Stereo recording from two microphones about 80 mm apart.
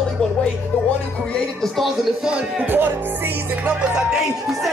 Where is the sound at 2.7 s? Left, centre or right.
Right.